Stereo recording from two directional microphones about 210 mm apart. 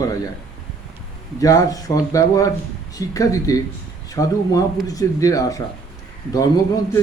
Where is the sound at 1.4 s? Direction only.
15° left (ahead or behind).